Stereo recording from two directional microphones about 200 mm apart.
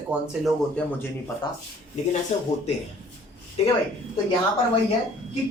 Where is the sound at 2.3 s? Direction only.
35° left (ahead or behind).